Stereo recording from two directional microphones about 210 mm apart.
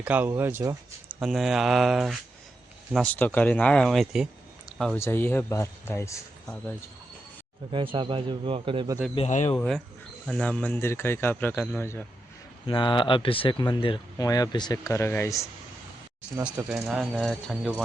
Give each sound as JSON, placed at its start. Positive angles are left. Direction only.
{"t": 0.0, "sound": "speech", "side_deg": -5}
{"t": 1.2, "sound": "speech", "side_deg": 0}
{"t": 7.9, "sound": "a man's voice", "side_deg": -25}
{"t": 9.1, "sound": "speech", "side_deg": 35}
{"t": 9.6, "sound": "speech", "side_deg": 5}
{"t": 12.6, "sound": "speech", "side_deg": 25}
{"t": 16.4, "sound": "speech", "side_deg": -5}